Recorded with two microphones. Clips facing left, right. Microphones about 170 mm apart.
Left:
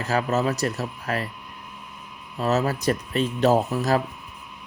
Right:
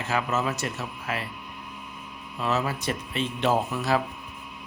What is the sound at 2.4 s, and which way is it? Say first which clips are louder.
Speech: left 5 dB; 40° left (ahead or behind).